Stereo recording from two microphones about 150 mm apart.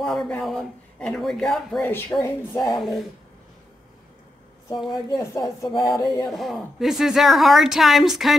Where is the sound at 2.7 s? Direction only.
Centre (ahead or behind).